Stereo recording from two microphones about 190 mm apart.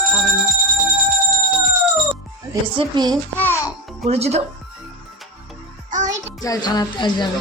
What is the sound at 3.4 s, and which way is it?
Music, 15° left (ahead or behind).